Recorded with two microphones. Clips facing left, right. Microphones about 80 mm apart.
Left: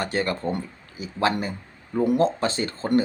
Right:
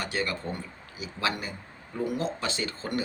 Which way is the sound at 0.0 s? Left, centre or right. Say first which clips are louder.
Left 6 dB; left.